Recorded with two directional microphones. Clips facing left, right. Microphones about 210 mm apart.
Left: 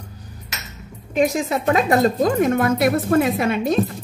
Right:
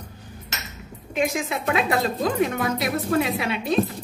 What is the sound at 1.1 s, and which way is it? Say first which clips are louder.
A woman's voice: left 6 dB; 35° left (ahead or behind).